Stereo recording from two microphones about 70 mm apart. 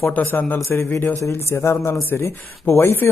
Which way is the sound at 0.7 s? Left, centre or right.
Left.